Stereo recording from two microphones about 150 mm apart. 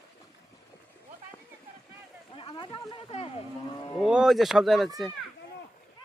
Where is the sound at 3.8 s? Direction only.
30° left (ahead or behind).